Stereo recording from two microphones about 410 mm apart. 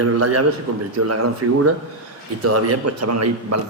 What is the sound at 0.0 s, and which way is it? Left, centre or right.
A man's voice, right.